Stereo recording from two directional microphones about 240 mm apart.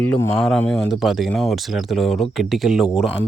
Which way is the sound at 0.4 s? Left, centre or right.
Centre.